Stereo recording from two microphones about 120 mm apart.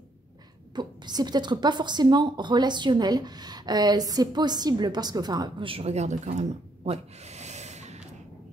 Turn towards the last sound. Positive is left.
turn(degrees=-70)  # may be behind; listen again after turning